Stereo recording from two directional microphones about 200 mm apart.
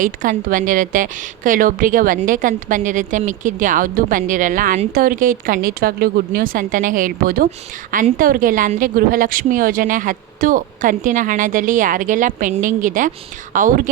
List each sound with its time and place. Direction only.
0.0 s a woman's voice: 40° right (ahead or behind)